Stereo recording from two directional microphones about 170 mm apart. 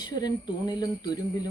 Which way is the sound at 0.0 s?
25° left (ahead or behind).